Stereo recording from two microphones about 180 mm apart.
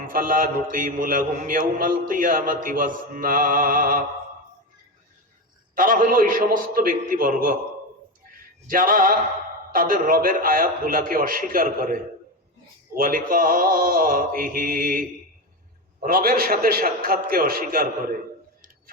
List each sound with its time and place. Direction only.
0.1 s mantra: 50° right (ahead or behind)
5.7 s mantra: 50° right (ahead or behind)
8.3 s music: 50° right (ahead or behind)
9.7 s mantra: 50° right (ahead or behind)
16.0 s mantra: 55° right (ahead or behind)